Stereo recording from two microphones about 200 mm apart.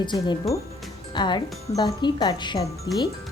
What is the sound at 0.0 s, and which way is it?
Speech, 20° left (ahead or behind).